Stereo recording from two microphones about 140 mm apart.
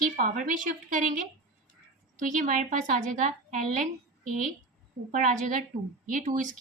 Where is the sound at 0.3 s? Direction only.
70° right (ahead or behind).